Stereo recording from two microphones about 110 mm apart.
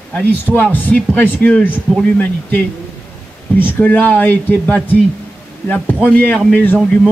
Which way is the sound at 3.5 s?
15° left (ahead or behind).